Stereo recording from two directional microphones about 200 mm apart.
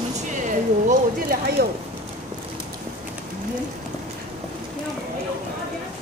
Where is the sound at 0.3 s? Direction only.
40° right (ahead or behind).